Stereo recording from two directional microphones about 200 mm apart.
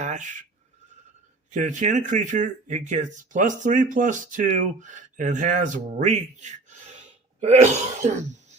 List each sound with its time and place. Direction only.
0.0 s speech: 35° right (ahead or behind)
1.5 s speech: 40° right (ahead or behind)